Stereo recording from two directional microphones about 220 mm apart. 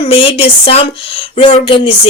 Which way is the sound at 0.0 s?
25° left (ahead or behind).